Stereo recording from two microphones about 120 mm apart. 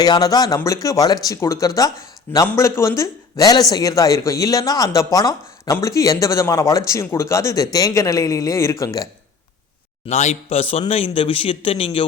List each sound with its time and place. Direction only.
0.0 s speech: 35° left (ahead or behind)
10.1 s a man's voice: 70° left (ahead or behind); by 12.0 s 50° left (ahead or behind)